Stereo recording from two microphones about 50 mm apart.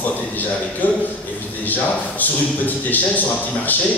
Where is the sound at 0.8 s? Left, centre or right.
Left.